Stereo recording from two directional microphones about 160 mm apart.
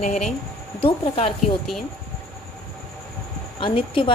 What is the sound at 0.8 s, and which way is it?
Speech, 35° left (ahead or behind).